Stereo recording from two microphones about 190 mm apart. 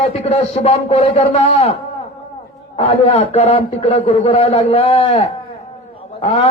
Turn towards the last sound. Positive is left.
turn(degrees=30)  # may be behind; listen again after turning